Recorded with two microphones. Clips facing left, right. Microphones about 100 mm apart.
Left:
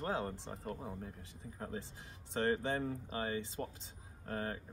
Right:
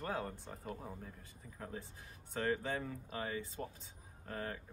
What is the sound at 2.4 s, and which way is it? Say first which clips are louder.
Speech: left 3 dB; 30° left (ahead or behind).